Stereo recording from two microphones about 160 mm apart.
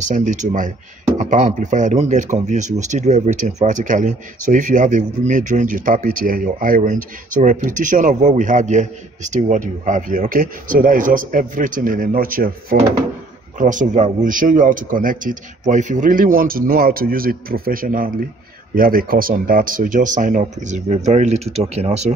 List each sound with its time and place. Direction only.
0.0 s a man's voice: 50° right (ahead or behind)